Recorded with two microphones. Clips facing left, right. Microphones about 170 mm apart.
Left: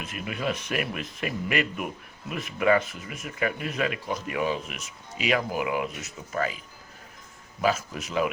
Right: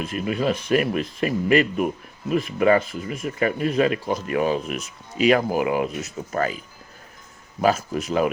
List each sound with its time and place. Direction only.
0.0 s speech: 30° right (ahead or behind)
7.6 s speech: 35° right (ahead or behind)